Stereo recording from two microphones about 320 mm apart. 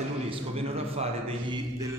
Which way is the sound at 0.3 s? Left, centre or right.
Centre.